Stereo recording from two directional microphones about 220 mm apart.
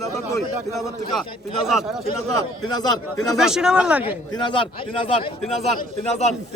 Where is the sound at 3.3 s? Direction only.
5° right (ahead or behind).